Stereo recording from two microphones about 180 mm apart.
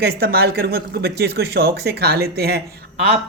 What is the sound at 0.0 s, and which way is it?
Speech, 60° right (ahead or behind).